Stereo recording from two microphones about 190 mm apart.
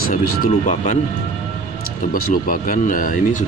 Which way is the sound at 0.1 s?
45° left (ahead or behind).